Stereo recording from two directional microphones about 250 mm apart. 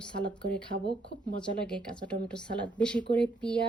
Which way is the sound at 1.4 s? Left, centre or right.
Centre.